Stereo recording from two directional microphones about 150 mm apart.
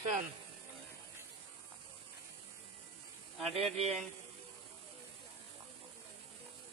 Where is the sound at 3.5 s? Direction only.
45° right (ahead or behind).